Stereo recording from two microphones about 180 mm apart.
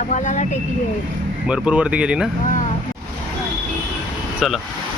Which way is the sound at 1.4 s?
5° right (ahead or behind).